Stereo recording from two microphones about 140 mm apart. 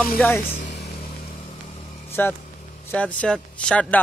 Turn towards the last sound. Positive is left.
turn(degrees=10)  # may be behind; listen again after turning